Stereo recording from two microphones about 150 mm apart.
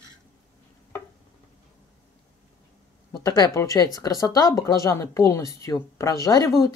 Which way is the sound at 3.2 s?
25° left (ahead or behind).